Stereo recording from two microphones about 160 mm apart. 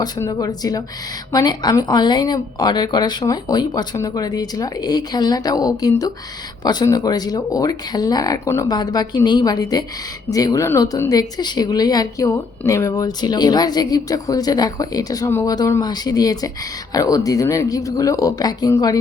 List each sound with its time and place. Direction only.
0.0 s speech: 25° left (ahead or behind)